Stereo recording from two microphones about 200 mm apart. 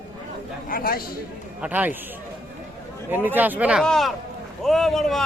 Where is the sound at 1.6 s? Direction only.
5° right (ahead or behind).